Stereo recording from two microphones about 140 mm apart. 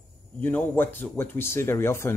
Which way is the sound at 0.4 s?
10° left (ahead or behind).